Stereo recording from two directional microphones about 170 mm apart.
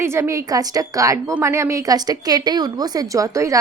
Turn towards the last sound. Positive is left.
turn(degrees=-20)  # may be behind; listen again after turning